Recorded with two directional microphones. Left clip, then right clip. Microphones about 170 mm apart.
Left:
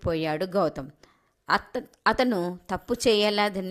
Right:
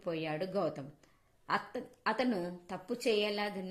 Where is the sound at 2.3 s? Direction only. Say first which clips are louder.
Left 9 dB; 20° left (ahead or behind).